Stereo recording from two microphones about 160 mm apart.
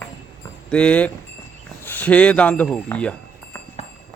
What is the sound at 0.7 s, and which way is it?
A man's voice, 5° left (ahead or behind).